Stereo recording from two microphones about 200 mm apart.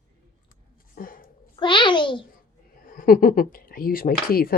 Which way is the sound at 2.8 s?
45° left (ahead or behind).